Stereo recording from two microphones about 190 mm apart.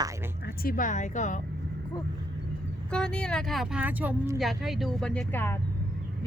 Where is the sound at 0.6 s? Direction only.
45° left (ahead or behind).